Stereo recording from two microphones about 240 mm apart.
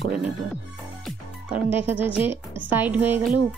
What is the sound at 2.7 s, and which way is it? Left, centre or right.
Speech, centre.